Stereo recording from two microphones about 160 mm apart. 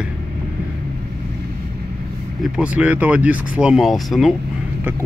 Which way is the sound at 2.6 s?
10° right (ahead or behind).